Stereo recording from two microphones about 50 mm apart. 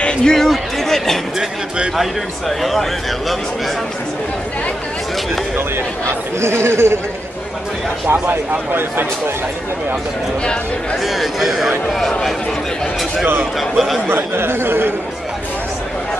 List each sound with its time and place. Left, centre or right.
0.0 s speech: centre
2.6 s speech: centre
6.0 s speech: right
8.1 s speech: right
11.1 s speech: centre
13.4 s speech: centre
14.0 s speech: right